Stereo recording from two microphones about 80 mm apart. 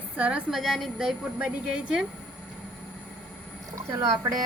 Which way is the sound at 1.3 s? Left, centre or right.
Centre.